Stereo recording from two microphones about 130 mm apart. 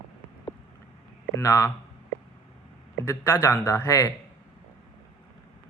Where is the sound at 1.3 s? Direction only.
25° left (ahead or behind).